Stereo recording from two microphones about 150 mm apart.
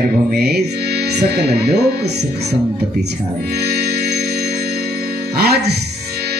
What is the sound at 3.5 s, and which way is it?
Music, 90° right.